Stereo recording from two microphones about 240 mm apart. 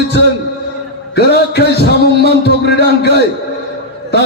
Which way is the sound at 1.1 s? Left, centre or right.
Left.